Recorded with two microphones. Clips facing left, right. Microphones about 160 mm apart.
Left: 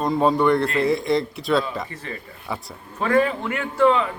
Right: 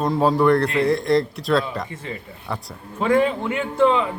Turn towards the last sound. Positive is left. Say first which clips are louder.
# even
turn(degrees=-20)  # may be behind; listen again after turning